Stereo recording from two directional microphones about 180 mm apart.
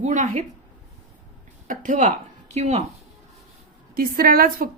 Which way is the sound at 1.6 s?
45° right (ahead or behind).